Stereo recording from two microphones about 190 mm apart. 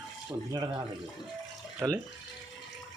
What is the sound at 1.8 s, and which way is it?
Speech, 10° right (ahead or behind).